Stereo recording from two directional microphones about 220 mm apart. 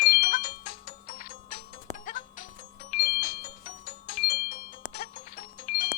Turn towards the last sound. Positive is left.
turn(degrees=40)  # may be behind; listen again after turning